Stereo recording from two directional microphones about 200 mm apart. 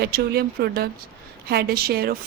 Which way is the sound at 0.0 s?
50° right (ahead or behind).